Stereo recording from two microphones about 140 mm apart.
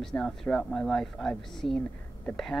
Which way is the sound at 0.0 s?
5° left (ahead or behind).